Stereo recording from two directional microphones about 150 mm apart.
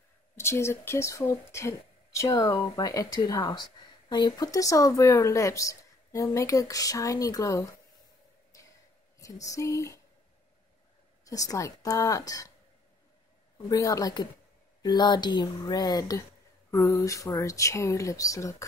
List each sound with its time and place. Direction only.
0.4 s speech: 15° left (ahead or behind)
9.2 s speech: 20° left (ahead or behind)
11.2 s speech: 20° left (ahead or behind)
13.7 s speech: 25° left (ahead or behind)